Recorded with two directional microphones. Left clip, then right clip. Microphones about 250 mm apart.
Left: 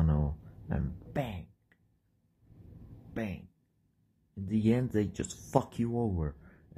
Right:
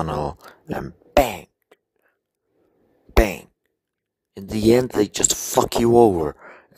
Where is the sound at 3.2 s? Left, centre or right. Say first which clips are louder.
Right 19 dB; right.